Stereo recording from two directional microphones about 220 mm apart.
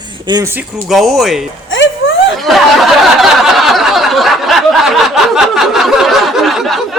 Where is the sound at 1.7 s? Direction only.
55° left (ahead or behind).